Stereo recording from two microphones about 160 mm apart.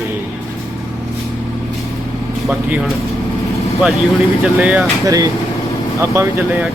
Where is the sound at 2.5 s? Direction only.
5° right (ahead or behind).